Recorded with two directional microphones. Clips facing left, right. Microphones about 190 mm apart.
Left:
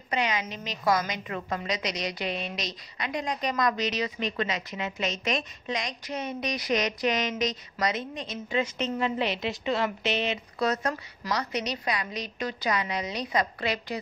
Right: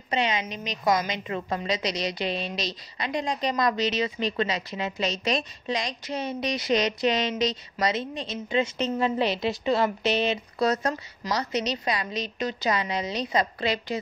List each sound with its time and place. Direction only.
0.1 s a woman's voice: 25° right (ahead or behind)